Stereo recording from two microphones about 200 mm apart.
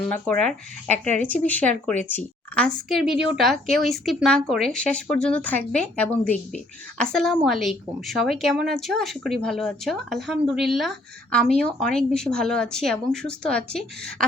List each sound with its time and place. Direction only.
0.0 s a woman's voice: 5° left (ahead or behind)
0.9 s speech: 35° right (ahead or behind)
1.3 s a woman's voice: 10° left (ahead or behind)